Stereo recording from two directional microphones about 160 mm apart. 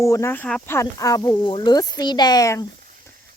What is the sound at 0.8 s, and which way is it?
Speech, 20° left (ahead or behind).